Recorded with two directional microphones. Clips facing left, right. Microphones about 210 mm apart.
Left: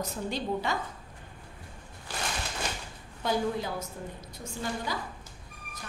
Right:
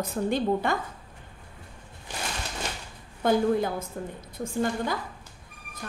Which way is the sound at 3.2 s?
55° right (ahead or behind).